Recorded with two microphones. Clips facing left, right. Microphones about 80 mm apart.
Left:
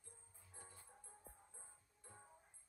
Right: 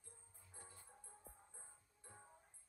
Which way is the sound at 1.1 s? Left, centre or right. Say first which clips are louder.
Even; centre.